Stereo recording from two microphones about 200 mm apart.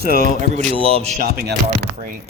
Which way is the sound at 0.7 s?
30° right (ahead or behind).